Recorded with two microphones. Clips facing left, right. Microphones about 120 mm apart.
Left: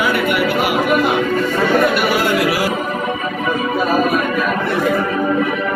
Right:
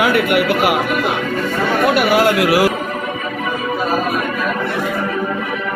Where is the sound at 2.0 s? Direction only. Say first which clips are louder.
Right 3 dB; 70° right (ahead or behind).